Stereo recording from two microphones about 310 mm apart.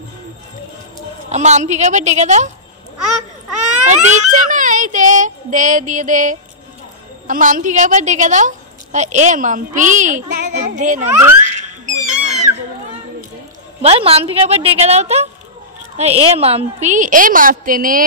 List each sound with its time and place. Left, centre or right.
1.3 s a woman's voice: right
3.6 s a woman's voice: right
11.1 s speech: centre
11.9 s cat: right
13.7 s a woman's voice: centre